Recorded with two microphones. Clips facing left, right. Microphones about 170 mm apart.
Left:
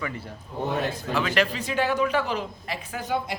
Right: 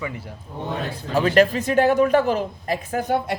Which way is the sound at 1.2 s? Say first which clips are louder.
Right 9 dB; 40° right (ahead or behind).